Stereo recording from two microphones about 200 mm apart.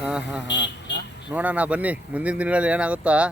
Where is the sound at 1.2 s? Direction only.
5° right (ahead or behind).